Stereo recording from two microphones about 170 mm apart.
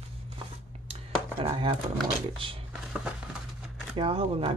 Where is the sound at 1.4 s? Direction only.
30° right (ahead or behind).